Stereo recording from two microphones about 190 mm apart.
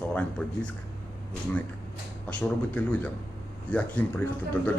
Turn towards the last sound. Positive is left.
turn(degrees=5)  # may be behind; listen again after turning